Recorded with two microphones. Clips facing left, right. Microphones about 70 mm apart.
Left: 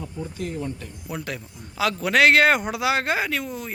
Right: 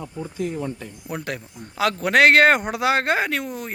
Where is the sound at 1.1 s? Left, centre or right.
Right.